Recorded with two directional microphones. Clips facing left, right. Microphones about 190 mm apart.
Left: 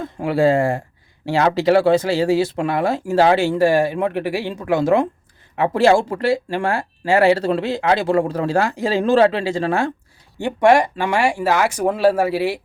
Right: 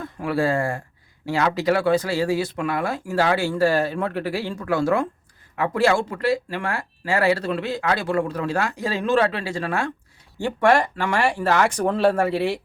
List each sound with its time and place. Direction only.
0.0 s speech: 25° left (ahead or behind)
10.3 s speech: 15° left (ahead or behind)